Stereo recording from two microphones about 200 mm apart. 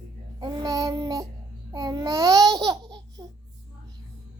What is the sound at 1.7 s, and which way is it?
Babbling, 20° right (ahead or behind).